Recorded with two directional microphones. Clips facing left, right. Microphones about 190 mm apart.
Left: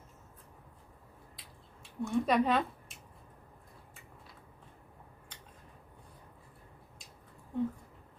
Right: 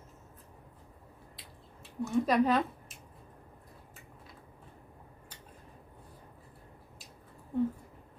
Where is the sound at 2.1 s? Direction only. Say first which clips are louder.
Right 2 dB; centre (ahead or behind).